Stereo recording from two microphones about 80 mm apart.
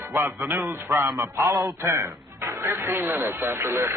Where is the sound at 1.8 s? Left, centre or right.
Right.